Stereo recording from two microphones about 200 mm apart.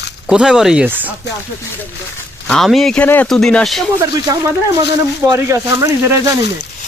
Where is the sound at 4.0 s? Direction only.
15° right (ahead or behind).